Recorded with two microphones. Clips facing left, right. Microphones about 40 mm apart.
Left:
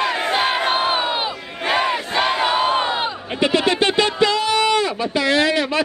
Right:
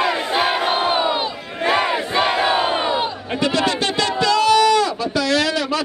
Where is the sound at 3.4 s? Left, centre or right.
Left.